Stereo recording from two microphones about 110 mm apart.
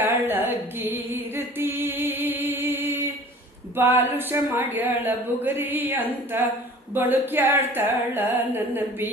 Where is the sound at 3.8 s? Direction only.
20° right (ahead or behind).